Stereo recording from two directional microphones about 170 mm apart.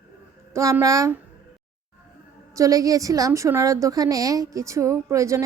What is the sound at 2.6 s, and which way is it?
A woman's voice, 20° right (ahead or behind).